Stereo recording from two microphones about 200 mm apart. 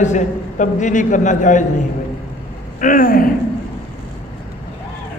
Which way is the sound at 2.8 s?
45° left (ahead or behind).